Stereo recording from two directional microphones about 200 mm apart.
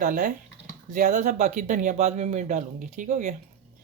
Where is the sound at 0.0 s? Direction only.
40° right (ahead or behind).